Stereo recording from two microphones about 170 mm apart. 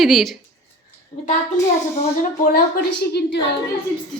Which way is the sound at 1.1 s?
15° left (ahead or behind).